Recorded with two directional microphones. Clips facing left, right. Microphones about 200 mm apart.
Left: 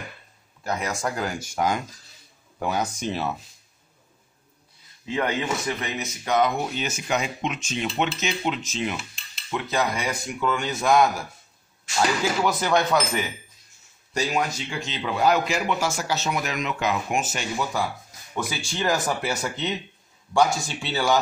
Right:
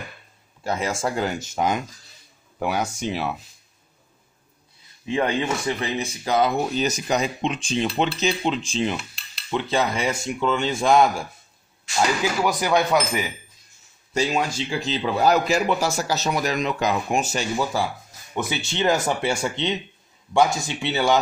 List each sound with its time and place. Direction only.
0.7 s speech: 30° right (ahead or behind); by 3.3 s 10° right (ahead or behind)
5.0 s a man's voice: 25° right (ahead or behind)
12.4 s speech: 10° right (ahead or behind)
14.1 s a man's voice: 25° right (ahead or behind)
18.3 s speech: 20° right (ahead or behind)